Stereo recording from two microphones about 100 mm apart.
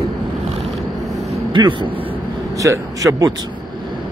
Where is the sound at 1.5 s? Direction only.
50° right (ahead or behind).